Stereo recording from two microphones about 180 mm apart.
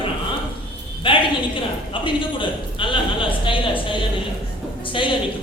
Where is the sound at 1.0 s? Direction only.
30° left (ahead or behind).